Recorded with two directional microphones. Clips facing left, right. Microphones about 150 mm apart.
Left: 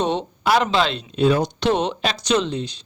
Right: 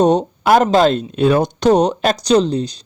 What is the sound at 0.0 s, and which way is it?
Speech, 45° right (ahead or behind).